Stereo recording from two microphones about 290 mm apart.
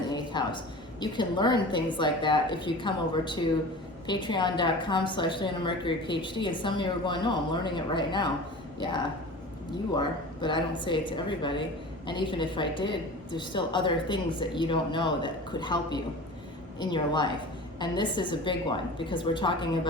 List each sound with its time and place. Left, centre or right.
0.1 s a woman's voice: centre